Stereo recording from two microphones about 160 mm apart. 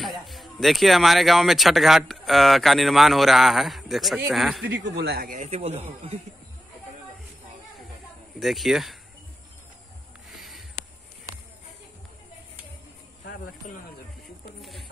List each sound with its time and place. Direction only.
0.0 s speech: centre (ahead or behind)
4.9 s speech: 85° right
5.4 s speech: 40° right (ahead or behind)
8.4 s speech: centre (ahead or behind)
10.3 s a sound: centre (ahead or behind)
14.6 s a sound: centre (ahead or behind)